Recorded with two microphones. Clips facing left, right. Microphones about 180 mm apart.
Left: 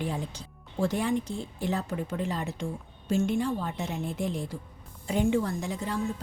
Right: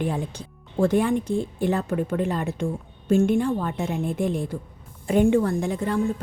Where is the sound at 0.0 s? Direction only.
55° right (ahead or behind).